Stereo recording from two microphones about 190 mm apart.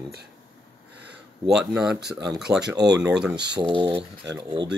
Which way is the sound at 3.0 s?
5° right (ahead or behind).